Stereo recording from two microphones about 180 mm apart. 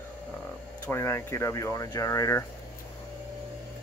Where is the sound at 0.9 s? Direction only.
15° left (ahead or behind).